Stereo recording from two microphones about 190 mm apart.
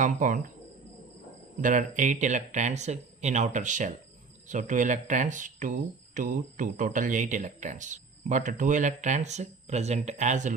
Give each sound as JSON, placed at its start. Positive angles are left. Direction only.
{"t": 0.0, "sound": "speech", "side_deg": -45}
{"t": 1.6, "sound": "speech", "side_deg": -40}